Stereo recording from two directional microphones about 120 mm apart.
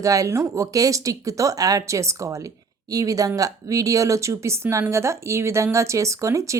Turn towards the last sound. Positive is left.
turn(degrees=-25)  # may be behind; listen again after turning